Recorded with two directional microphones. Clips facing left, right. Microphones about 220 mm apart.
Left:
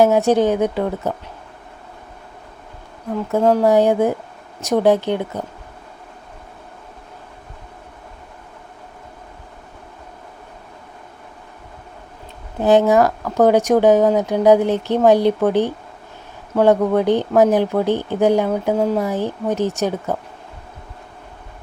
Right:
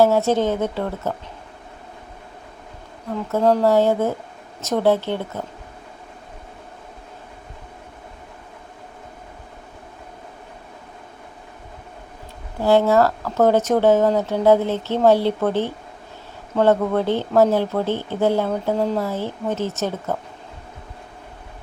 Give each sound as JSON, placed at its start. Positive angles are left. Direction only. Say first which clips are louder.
{"t": 0.0, "sound": "speech", "louder": "left 3 dB", "side_deg": 15}
{"t": 3.3, "sound": "speech", "louder": "left 2 dB", "side_deg": 15}
{"t": 12.5, "sound": "speech", "louder": "left 2 dB", "side_deg": 20}